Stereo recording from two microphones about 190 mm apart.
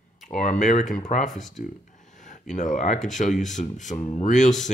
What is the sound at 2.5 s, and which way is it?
Speech, 40° left (ahead or behind).